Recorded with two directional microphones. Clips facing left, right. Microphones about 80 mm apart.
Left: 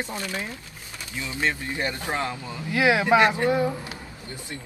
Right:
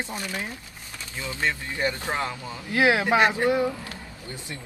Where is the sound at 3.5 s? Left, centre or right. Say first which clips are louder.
Even; left.